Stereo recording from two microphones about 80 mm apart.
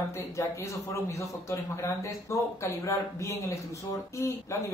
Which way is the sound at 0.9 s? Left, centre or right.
Left.